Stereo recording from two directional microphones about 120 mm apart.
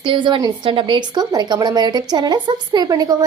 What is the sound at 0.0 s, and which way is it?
A woman's voice, 45° right (ahead or behind).